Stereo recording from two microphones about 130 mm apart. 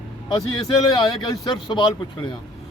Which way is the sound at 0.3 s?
35° left (ahead or behind).